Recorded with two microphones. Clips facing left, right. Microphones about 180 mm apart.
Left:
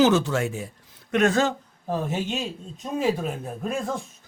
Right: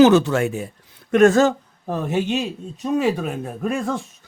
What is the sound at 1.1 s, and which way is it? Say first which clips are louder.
Speech: right 7 dB; 45° right (ahead or behind).